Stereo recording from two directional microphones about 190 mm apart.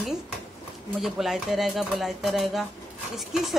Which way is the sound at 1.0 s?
Centre (ahead or behind).